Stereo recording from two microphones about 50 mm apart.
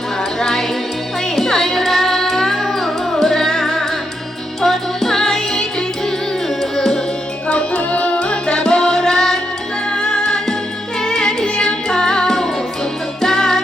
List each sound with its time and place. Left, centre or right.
0.3 s music: centre
7.4 s music: left